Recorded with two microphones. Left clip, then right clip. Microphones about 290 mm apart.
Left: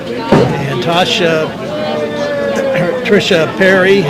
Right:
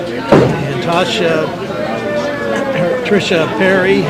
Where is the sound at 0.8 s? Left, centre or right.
Left.